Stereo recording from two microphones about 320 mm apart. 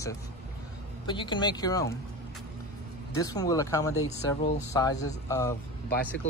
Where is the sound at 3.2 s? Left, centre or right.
Centre.